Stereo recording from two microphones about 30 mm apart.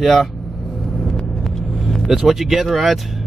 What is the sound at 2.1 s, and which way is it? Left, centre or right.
Speech, centre.